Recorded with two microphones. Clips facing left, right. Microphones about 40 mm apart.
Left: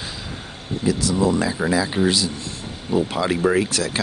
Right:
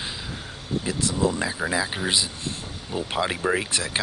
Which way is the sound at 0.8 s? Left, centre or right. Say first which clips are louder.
Left 10 dB; right.